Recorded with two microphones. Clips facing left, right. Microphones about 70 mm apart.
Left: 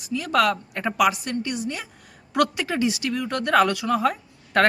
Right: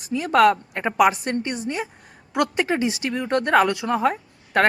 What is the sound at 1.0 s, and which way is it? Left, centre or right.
A woman's voice, right.